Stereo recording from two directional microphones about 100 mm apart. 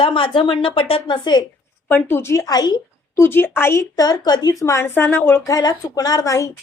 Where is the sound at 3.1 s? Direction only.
20° left (ahead or behind).